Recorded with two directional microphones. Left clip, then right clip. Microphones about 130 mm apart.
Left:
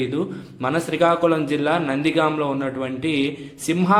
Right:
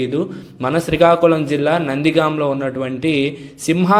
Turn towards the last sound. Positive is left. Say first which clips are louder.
# right 4 dB
turn(degrees=-35)  # may be behind; listen again after turning